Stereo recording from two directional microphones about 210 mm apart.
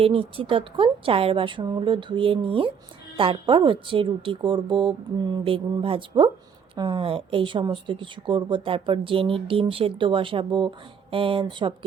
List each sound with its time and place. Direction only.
0.0 s speech: 25° right (ahead or behind)